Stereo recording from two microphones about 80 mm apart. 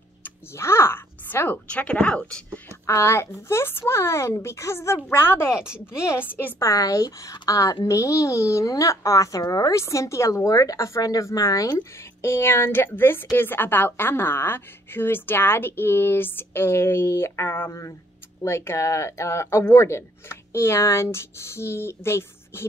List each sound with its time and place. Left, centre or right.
0.2 s speech: left; by 2.6 s centre
2.9 s speech: left
6.6 s a woman's voice: left
12.0 s a woman's voice: left